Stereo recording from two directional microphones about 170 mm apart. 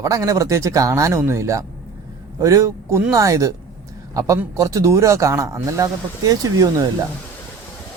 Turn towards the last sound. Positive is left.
turn(degrees=-20)  # may be behind; listen again after turning